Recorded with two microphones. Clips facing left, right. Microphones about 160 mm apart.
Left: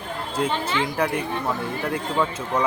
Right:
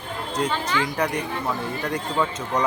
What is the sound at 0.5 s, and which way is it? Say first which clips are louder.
Speech: even; 25° left (ahead or behind).